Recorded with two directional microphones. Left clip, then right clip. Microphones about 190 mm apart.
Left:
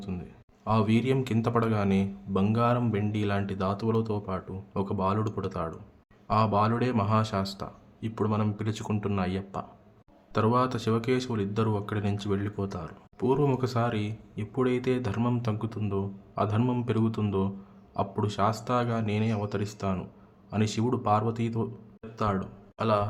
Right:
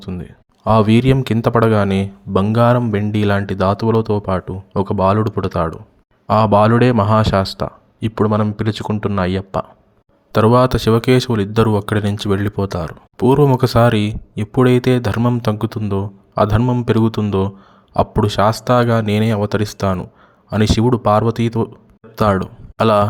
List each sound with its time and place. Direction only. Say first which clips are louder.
0.0 s speech: right 10 dB; 40° right (ahead or behind)
16.6 s a man's voice: right 11 dB; 20° right (ahead or behind)
16.8 s speech: right 13 dB; 35° right (ahead or behind)